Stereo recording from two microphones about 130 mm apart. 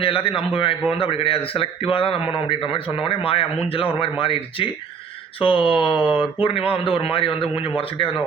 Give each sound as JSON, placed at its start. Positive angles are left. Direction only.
{"t": 0.0, "sound": "a man's voice", "side_deg": 45}